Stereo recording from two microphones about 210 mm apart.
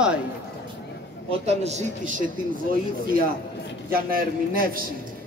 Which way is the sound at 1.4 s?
30° right (ahead or behind).